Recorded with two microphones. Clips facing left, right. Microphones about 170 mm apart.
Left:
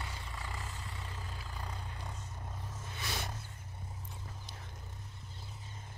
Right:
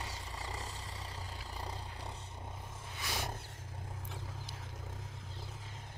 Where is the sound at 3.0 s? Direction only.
10° right (ahead or behind).